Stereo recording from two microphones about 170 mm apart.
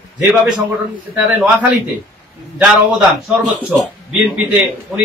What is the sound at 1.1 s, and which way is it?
Speech, 10° right (ahead or behind).